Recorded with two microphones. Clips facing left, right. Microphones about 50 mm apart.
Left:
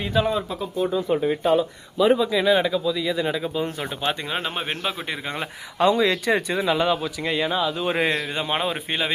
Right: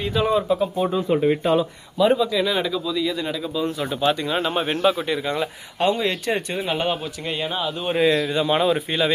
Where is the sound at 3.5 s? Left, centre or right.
Left.